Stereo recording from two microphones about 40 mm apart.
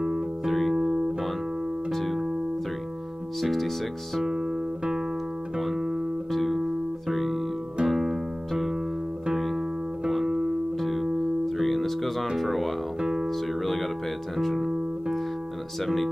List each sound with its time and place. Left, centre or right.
0.5 s music: centre
1.9 s music: centre
3.3 s speech: centre
4.3 s music: centre
6.3 s music: centre
10.8 s music: centre
13.0 s music: centre
13.5 s music: centre
15.8 s speech: centre